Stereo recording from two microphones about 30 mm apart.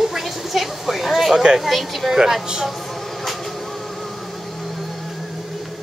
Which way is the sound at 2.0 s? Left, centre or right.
Centre.